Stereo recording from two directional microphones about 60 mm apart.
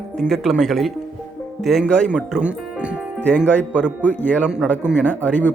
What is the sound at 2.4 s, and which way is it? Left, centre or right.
Speech, centre.